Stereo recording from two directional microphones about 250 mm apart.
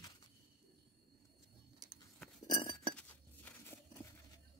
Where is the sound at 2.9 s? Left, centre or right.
Centre.